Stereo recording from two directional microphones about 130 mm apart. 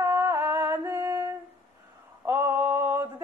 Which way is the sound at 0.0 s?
20° right (ahead or behind).